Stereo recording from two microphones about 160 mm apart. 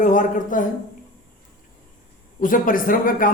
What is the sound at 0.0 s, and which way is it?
Speech, 50° left (ahead or behind).